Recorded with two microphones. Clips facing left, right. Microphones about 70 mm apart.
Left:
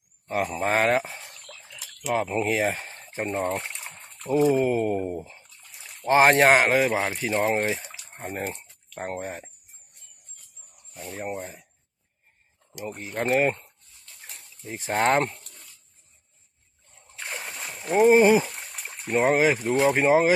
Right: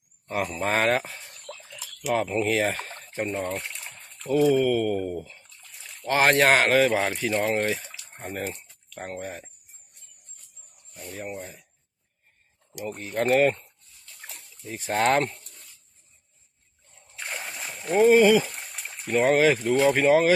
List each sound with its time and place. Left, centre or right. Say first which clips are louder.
0.6 s speech: left 1 dB; centre
2.1 s speech: even; centre
9.0 s speech: left 3 dB; left
11.2 s speech: left 3 dB; left
12.9 s speech: right 2 dB; centre
14.6 s speech: even; left
17.2 s splash: even; centre
18.1 s speech: even; left
18.4 s a sound: even; centre
19.5 s speech: right 1 dB; centre